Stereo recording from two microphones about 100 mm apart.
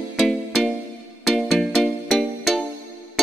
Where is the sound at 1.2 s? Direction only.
Centre (ahead or behind).